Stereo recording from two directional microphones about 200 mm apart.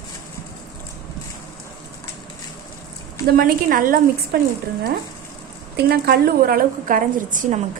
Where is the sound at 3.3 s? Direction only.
45° right (ahead or behind).